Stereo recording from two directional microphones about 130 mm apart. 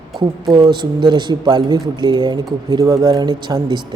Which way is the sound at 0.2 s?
30° right (ahead or behind).